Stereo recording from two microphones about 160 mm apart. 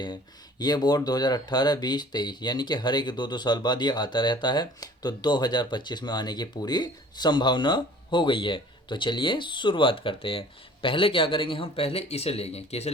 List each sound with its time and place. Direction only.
0.6 s speech: 25° left (ahead or behind); by 12.9 s 40° left (ahead or behind)